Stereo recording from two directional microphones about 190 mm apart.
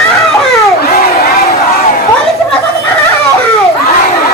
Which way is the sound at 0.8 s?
55° left (ahead or behind).